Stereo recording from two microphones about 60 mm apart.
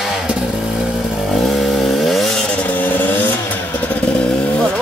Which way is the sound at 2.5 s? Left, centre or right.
Left.